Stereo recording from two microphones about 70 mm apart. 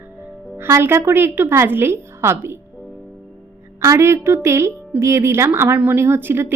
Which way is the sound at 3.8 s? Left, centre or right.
Right.